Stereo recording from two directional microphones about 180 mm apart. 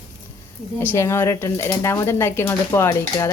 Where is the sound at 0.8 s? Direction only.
15° left (ahead or behind).